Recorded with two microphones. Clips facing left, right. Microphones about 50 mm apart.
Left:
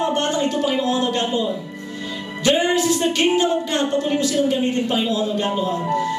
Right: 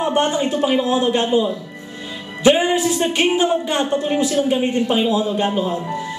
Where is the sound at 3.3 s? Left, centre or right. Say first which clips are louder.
Right 1 dB; centre.